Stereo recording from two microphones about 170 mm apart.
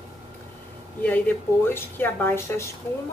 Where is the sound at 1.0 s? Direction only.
10° left (ahead or behind).